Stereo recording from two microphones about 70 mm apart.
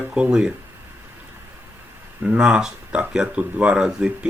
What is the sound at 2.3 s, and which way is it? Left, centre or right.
Speech, centre.